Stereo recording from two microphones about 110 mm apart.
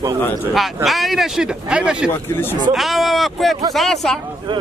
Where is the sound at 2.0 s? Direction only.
20° left (ahead or behind).